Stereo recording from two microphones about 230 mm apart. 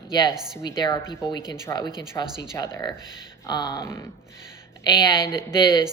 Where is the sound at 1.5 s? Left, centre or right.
Centre.